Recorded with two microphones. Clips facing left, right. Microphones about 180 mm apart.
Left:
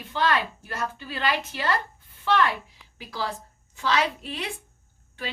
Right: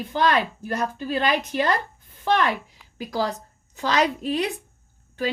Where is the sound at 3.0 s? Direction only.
40° right (ahead or behind).